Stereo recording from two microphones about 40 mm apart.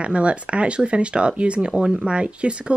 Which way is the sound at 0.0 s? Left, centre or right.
Right.